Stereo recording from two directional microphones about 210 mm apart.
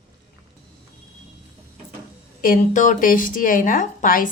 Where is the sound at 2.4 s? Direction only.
40° left (ahead or behind).